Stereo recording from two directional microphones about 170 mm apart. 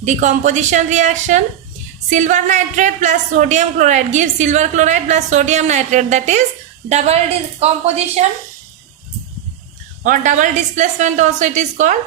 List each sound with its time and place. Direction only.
0.0 s speech: 45° right (ahead or behind)
10.0 s speech: 50° right (ahead or behind)